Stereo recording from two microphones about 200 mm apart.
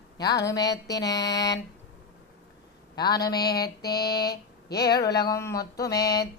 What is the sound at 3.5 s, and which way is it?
Mantra, 50° left (ahead or behind).